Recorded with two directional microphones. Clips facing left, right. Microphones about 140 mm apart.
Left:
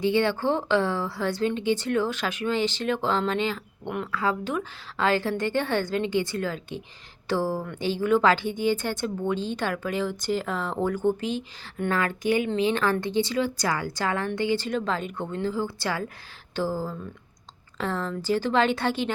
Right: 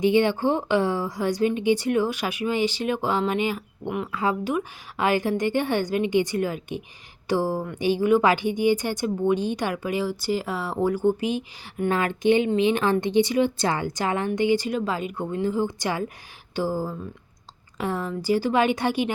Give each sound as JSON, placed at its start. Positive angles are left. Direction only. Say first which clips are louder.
{"t": 0.0, "sound": "a woman's voice", "louder": "right 3 dB", "side_deg": -15}